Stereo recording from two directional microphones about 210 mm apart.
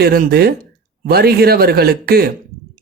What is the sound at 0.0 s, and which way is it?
Speech, 45° right (ahead or behind).